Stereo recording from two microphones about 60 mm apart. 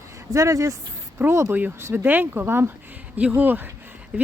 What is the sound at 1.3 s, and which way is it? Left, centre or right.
Speech, right.